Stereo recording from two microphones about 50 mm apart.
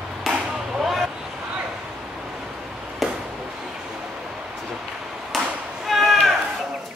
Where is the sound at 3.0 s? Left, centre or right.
Centre.